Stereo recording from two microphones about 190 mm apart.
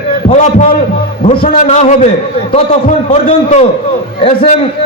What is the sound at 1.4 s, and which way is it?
Speech, 45° left (ahead or behind).